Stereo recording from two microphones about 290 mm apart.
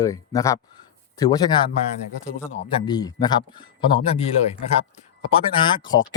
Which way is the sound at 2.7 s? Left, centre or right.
Centre.